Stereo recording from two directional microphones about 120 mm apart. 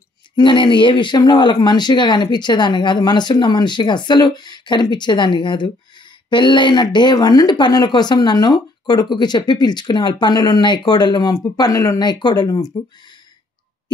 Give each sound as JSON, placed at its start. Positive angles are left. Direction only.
{"t": 0.4, "sound": "speech", "side_deg": 40}